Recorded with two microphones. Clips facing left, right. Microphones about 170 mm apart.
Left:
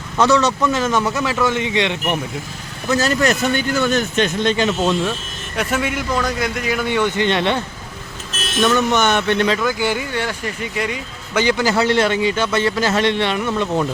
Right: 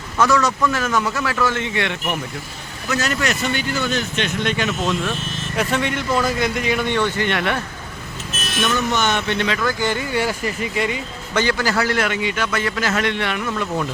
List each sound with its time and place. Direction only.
0.2 s a man's voice: 25° left (ahead or behind)
2.9 s speech: 35° left (ahead or behind)
5.5 s speech: 5° left (ahead or behind); by 7.6 s 25° left (ahead or behind)
8.9 s speech: 55° left (ahead or behind)
9.6 s speech: 15° left (ahead or behind)
10.1 s speech: 10° right (ahead or behind)
11.3 s a man's voice: 15° left (ahead or behind)